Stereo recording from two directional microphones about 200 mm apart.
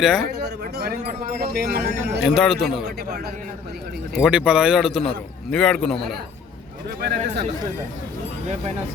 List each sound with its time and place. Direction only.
0.0 s speech: 5° right (ahead or behind)
0.6 s speech: 50° right (ahead or behind)
2.2 s speech: centre (ahead or behind)
4.2 s speech: 5° right (ahead or behind)
7.0 s speech: 55° right (ahead or behind)